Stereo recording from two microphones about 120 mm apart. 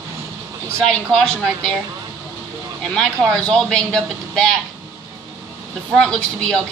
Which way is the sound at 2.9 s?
5° left (ahead or behind).